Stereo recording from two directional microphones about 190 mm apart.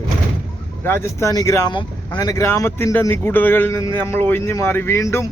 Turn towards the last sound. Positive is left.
turn(degrees=15)  # may be behind; listen again after turning